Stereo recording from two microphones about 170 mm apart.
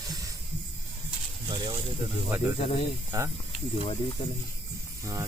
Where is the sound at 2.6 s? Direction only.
40° left (ahead or behind).